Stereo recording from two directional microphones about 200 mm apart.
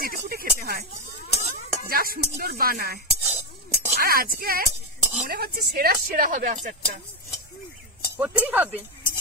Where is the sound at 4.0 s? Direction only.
45° right (ahead or behind).